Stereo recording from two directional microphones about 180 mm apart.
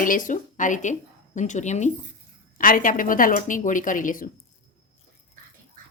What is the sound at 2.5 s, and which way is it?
Speech, 50° left (ahead or behind).